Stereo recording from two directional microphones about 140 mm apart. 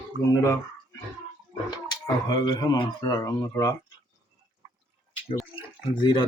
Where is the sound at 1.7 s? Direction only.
30° left (ahead or behind).